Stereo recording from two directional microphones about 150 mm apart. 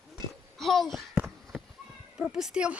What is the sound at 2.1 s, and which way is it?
Speech, 5° right (ahead or behind).